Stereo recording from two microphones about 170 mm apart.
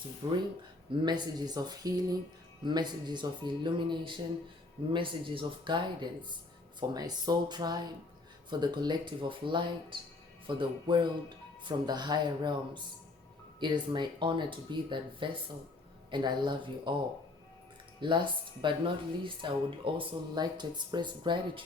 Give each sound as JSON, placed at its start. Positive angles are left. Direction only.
{"t": 0.2, "sound": "speech", "side_deg": -30}
{"t": 18.0, "sound": "speech", "side_deg": -30}